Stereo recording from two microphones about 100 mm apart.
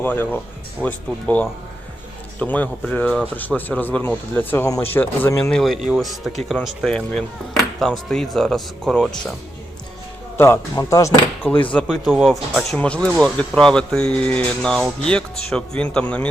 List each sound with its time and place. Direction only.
0.0 s speech: 20° left (ahead or behind)
5.5 s speech: 5° left (ahead or behind)
10.3 s speech: 25° left (ahead or behind)
11.7 s speech: 10° left (ahead or behind)